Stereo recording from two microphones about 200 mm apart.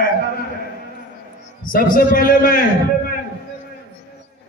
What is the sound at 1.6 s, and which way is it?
A man's voice, 45° left (ahead or behind).